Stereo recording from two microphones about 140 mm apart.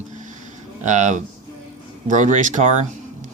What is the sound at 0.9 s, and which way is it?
Speech, 60° right (ahead or behind).